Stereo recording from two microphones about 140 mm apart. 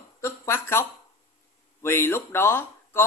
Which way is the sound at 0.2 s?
20° left (ahead or behind).